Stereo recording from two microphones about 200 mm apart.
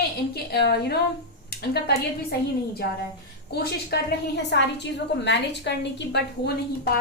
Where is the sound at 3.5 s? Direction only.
55° left (ahead or behind).